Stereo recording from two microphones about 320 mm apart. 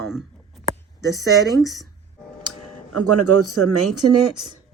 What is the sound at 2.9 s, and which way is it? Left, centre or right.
Speech, right.